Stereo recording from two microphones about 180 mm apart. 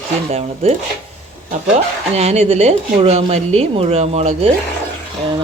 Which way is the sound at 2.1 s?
35° right (ahead or behind).